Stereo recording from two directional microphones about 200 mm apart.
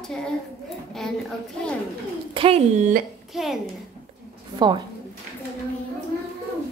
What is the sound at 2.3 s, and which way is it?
Speech, 30° right (ahead or behind).